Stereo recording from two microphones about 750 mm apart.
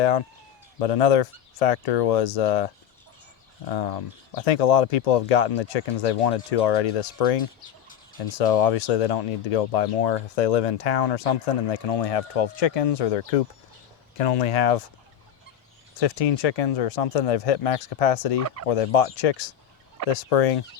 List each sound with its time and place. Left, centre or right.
0.0 s speech: left
16.0 s speech: left